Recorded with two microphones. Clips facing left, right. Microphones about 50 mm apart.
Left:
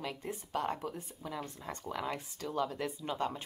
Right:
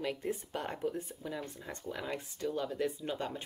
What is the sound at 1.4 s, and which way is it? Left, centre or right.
Speech, centre.